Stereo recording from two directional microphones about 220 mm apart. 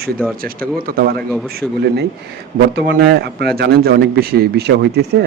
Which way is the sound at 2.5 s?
45° right (ahead or behind).